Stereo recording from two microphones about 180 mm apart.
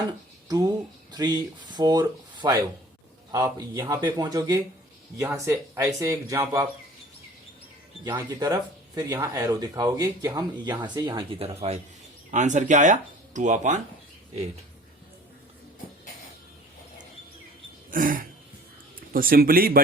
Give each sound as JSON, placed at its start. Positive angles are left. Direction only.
{"t": 0.4, "sound": "a man's voice", "side_deg": -20}
{"t": 8.1, "sound": "a man's voice", "side_deg": -20}
{"t": 11.3, "sound": "speech", "side_deg": -35}
{"t": 17.9, "sound": "a sound", "side_deg": -50}
{"t": 19.1, "sound": "speech", "side_deg": -55}